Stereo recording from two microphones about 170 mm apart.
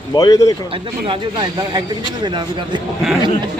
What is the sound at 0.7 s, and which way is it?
Speech, 30° right (ahead or behind).